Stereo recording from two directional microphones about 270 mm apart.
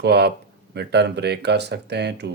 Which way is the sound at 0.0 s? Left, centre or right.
Right.